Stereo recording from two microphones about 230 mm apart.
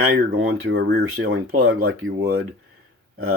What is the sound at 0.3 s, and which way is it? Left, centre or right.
Speech, right.